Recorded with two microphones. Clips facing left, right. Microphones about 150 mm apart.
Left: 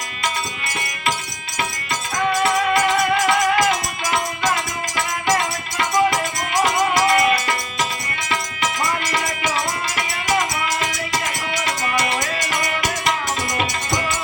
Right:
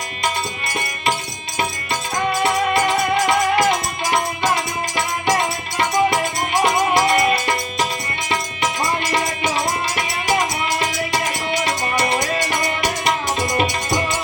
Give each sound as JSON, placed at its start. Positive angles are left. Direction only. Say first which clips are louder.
{"t": 2.1, "sound": "music", "louder": "even", "side_deg": -20}
{"t": 11.6, "sound": "music", "louder": "even", "side_deg": -25}